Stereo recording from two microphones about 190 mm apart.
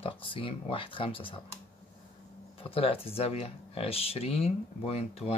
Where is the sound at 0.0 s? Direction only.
30° left (ahead or behind).